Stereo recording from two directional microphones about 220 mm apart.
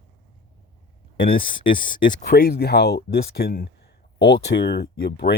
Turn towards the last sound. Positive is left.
turn(degrees=45)  # may be behind; listen again after turning